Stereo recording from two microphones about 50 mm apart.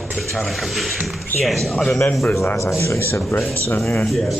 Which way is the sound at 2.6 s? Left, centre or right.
Left.